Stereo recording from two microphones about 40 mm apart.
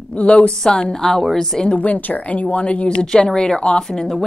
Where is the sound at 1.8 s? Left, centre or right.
Left.